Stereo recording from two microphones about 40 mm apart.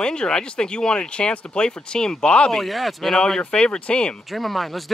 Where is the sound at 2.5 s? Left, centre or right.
Centre.